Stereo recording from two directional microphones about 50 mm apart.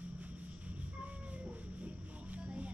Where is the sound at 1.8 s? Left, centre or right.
Right.